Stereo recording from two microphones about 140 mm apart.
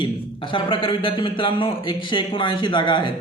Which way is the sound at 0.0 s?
35° left (ahead or behind).